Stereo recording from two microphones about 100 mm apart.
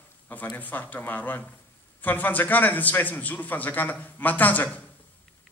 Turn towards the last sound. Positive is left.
turn(degrees=15)  # may be behind; listen again after turning